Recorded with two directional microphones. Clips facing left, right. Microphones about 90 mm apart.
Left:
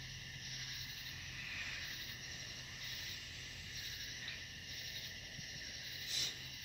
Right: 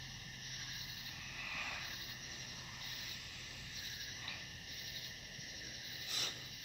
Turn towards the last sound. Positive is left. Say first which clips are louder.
# right 3 dB
turn(degrees=-45)  # may be behind; listen again after turning